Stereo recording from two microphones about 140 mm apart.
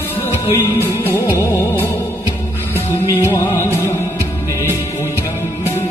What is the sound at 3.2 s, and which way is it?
Music, 20° left (ahead or behind).